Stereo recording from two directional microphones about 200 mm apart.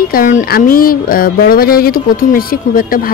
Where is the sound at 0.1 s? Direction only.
40° left (ahead or behind).